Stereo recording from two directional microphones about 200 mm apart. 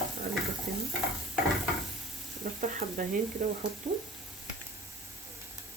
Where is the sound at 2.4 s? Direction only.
45° right (ahead or behind).